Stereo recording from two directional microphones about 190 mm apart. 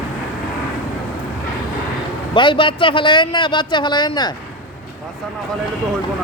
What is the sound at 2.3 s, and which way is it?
A man's voice, 25° left (ahead or behind).